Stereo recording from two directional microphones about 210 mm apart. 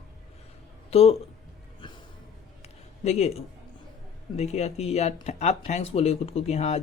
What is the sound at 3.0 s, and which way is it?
Speech, 30° left (ahead or behind).